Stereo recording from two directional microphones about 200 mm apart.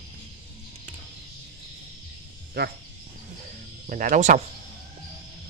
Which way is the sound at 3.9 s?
40° right (ahead or behind).